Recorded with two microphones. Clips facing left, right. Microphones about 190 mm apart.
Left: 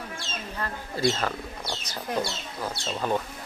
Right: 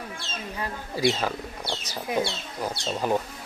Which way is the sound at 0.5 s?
10° right (ahead or behind).